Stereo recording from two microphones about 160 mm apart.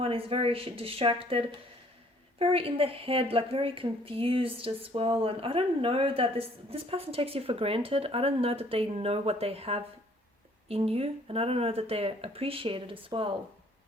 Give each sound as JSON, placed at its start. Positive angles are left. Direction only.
{"t": 0.0, "sound": "a woman's voice", "side_deg": -35}